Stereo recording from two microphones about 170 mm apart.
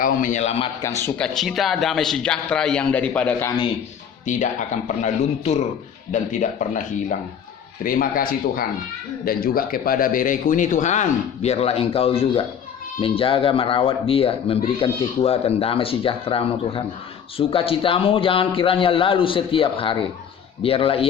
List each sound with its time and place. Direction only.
0.0 s speech: 50° left (ahead or behind)
0.8 s a man's voice: 15° left (ahead or behind)
1.4 s a man's voice: centre (ahead or behind)
4.3 s a man's voice: 45° left (ahead or behind)